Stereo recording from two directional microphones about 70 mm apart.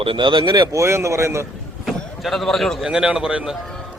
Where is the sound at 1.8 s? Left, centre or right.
Centre.